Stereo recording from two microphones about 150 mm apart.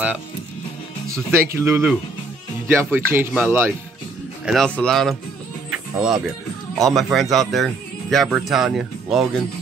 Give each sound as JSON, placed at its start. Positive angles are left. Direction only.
{"t": 1.1, "sound": "speech", "side_deg": -15}
{"t": 4.5, "sound": "speech", "side_deg": 5}
{"t": 5.7, "sound": "music", "side_deg": -5}
{"t": 6.9, "sound": "speech", "side_deg": 0}